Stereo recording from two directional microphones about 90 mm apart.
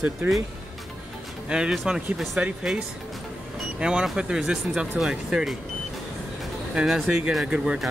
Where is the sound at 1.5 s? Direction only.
10° right (ahead or behind).